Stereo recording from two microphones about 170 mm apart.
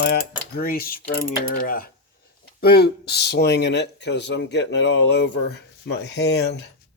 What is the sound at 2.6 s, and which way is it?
Speech, 65° left (ahead or behind).